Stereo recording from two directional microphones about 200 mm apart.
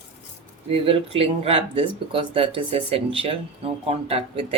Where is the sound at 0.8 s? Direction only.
30° right (ahead or behind).